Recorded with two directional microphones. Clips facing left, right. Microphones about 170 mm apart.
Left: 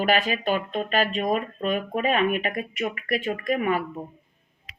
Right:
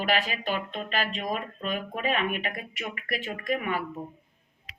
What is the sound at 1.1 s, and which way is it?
Speech, 45° left (ahead or behind).